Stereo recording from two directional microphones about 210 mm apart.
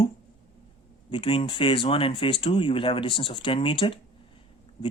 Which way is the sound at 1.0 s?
25° left (ahead or behind).